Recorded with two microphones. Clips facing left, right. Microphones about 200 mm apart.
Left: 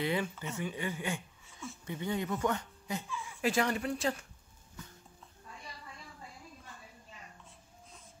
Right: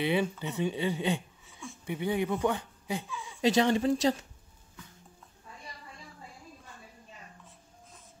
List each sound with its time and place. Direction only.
0.1 s speech: 20° right (ahead or behind)